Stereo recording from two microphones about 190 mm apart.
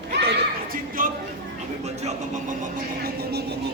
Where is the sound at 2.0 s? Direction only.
35° right (ahead or behind).